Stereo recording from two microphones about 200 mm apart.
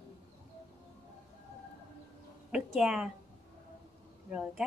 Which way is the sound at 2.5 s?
5° right (ahead or behind).